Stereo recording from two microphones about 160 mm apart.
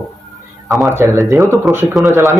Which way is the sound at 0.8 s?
20° right (ahead or behind).